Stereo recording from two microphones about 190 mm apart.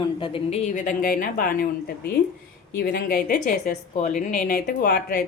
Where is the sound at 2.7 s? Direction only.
50° left (ahead or behind).